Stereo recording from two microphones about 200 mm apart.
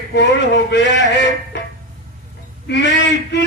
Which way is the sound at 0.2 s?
60° left (ahead or behind).